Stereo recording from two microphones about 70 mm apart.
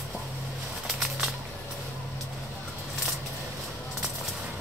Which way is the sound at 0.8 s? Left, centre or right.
Centre.